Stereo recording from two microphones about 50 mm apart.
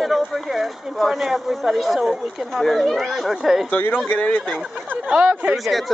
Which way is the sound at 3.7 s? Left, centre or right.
Left.